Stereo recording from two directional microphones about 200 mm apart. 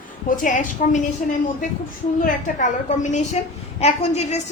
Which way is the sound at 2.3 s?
40° left (ahead or behind).